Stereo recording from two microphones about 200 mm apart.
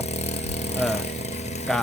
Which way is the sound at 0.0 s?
35° left (ahead or behind).